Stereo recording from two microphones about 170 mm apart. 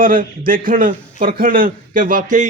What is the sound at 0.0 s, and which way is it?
A man's voice, 55° right (ahead or behind).